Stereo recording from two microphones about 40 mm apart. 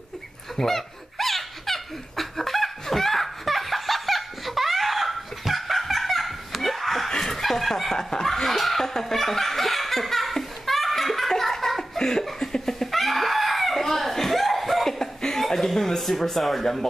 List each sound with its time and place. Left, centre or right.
0.6 s laughter: centre
7.1 s snicker: centre
7.9 s laughter: centre
12.0 s laughter: centre
12.3 s a sound: centre
14.9 s chuckle: centre